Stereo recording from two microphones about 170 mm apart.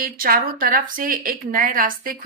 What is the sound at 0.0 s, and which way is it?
Speech, 60° right (ahead or behind).